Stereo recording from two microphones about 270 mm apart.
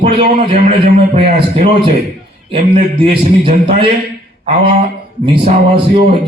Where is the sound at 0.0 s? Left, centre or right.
Right.